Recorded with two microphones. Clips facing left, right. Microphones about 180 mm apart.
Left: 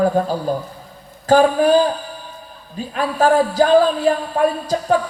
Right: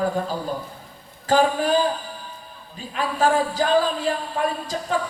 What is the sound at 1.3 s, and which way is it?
Speech, 40° left (ahead or behind).